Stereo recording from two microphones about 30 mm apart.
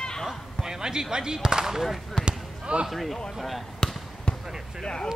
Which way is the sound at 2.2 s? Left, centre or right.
Right.